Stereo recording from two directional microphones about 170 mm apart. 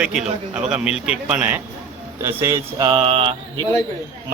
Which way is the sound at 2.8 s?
35° right (ahead or behind).